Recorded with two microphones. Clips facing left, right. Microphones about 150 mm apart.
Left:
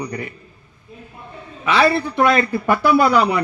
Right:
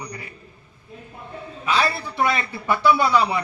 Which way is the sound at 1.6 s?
80° left.